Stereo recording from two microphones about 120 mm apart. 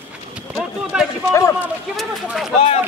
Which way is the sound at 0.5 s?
Centre (ahead or behind).